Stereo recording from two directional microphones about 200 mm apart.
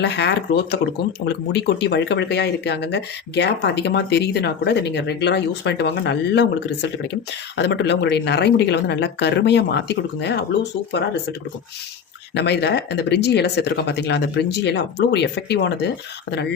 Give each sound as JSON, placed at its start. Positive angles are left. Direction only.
{"t": 0.0, "sound": "speech", "side_deg": 55}